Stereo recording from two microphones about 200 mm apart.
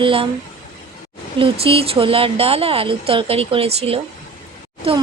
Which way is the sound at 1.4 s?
30° right (ahead or behind).